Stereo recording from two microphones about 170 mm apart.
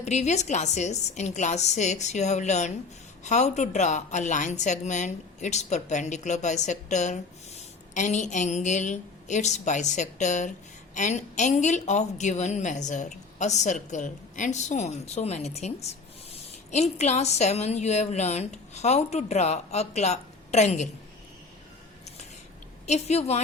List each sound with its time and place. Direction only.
0.0 s a woman's voice: 45° left (ahead or behind)
22.9 s a woman's voice: 40° left (ahead or behind)